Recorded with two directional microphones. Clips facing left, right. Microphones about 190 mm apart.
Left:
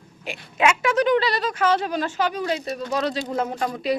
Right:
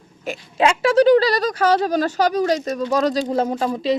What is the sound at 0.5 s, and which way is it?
Speech, 30° right (ahead or behind).